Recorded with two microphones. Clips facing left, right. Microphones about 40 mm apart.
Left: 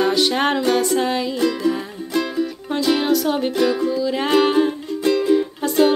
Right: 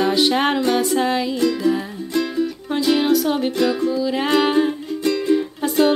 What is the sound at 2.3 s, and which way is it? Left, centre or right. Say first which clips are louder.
Music: right 1 dB; centre.